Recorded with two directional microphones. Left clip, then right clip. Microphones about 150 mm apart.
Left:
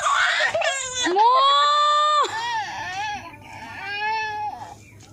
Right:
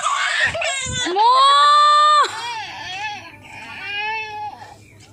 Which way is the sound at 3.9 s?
15° left (ahead or behind).